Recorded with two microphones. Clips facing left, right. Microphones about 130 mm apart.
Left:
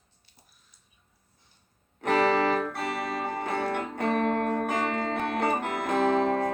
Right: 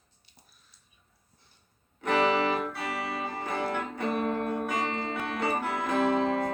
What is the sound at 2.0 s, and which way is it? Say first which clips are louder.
Music: left 2 dB; 45° left (ahead or behind).